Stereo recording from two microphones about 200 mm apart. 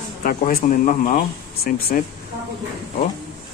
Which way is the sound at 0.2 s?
45° left (ahead or behind).